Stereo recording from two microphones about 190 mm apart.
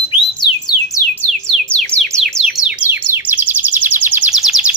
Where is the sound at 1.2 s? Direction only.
5° left (ahead or behind).